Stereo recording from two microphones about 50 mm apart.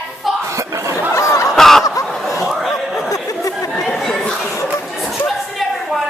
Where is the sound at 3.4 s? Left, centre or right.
Left.